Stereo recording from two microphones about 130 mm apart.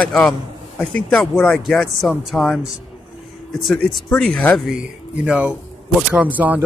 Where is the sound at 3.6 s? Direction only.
5° left (ahead or behind).